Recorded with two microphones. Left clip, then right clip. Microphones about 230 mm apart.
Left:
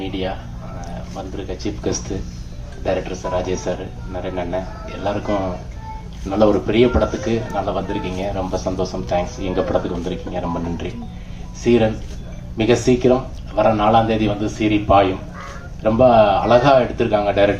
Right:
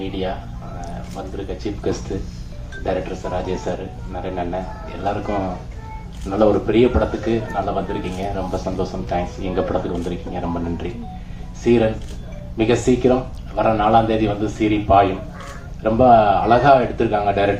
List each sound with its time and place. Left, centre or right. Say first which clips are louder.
0.0 s speech: even; left
11.6 s speech: even; left